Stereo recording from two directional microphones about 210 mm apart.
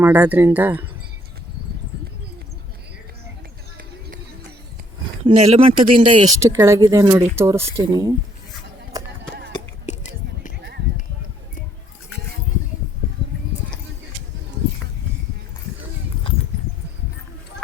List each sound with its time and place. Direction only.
0.0 s speech: 10° right (ahead or behind)
5.2 s speech: 30° right (ahead or behind)
9.5 s whispering: 35° left (ahead or behind)